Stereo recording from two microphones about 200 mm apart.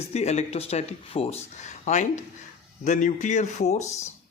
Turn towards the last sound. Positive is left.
turn(degrees=35)  # may be behind; listen again after turning